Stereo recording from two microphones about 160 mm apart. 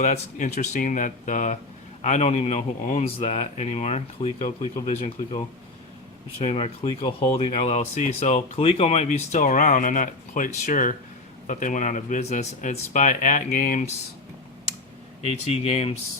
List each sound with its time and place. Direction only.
0.0 s speech: 50° left (ahead or behind)
15.2 s speech: 40° left (ahead or behind)